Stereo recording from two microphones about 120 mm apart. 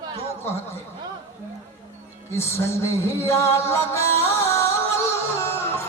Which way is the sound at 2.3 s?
20° left (ahead or behind).